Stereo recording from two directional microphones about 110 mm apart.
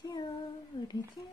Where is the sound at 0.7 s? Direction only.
40° left (ahead or behind).